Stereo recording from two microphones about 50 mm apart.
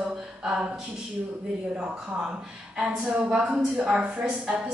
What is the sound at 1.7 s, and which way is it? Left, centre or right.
Speech, right.